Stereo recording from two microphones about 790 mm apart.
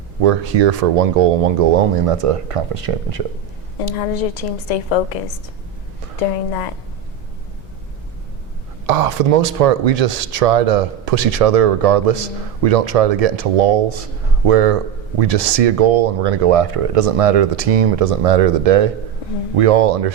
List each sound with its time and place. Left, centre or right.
0.2 s speech: right
3.8 s a woman's voice: left
6.1 s a woman's voice: left
8.9 s speech: right